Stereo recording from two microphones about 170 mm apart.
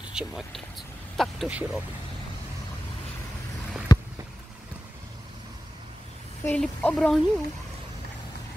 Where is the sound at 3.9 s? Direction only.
20° left (ahead or behind).